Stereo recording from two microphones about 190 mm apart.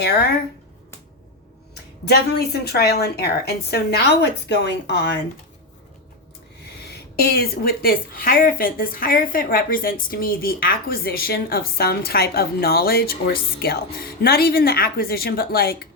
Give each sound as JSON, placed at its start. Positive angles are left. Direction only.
{"t": 0.0, "sound": "a woman's voice", "side_deg": 60}
{"t": 2.0, "sound": "a woman's voice", "side_deg": 60}
{"t": 7.2, "sound": "speech", "side_deg": 55}